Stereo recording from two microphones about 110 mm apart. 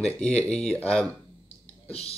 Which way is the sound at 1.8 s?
70° left (ahead or behind).